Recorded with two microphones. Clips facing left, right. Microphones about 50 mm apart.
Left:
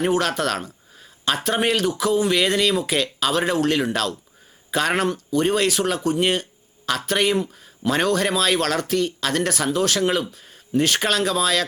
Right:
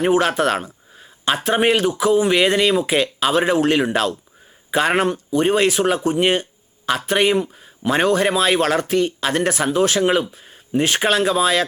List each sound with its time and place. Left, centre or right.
0.0 s speech: right